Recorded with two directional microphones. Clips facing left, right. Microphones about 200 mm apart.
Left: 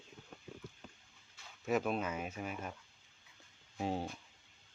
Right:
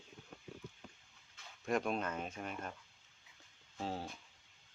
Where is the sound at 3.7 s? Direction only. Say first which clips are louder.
Left 4 dB; 15° left (ahead or behind).